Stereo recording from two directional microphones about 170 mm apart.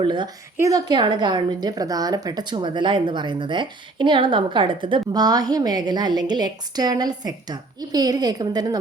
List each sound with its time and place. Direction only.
0.0 s a woman's voice: 25° right (ahead or behind)